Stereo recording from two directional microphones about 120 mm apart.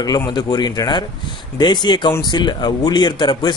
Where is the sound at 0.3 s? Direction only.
35° left (ahead or behind).